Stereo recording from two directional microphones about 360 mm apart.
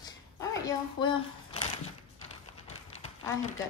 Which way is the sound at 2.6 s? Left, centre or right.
Centre.